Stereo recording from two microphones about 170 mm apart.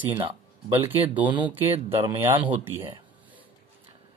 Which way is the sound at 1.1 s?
10° right (ahead or behind).